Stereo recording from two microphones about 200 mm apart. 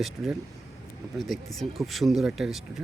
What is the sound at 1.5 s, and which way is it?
Speech, centre (ahead or behind).